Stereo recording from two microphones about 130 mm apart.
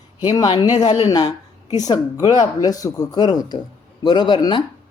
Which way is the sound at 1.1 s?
30° left (ahead or behind).